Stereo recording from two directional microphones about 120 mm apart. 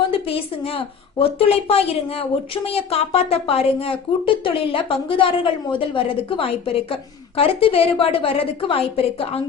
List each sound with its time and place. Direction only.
0.1 s a woman's voice: 50° left (ahead or behind)